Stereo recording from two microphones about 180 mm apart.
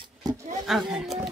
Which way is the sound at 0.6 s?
Centre (ahead or behind).